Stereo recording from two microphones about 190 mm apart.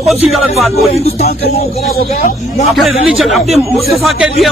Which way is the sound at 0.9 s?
30° left (ahead or behind).